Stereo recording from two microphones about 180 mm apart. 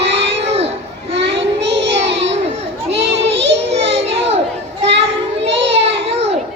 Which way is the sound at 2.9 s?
80° right.